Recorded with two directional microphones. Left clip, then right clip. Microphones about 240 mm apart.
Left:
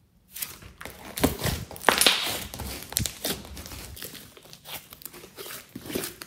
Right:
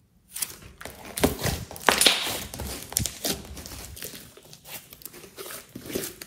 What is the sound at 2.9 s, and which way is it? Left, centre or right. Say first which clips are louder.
Crumpling: right 1 dB; centre.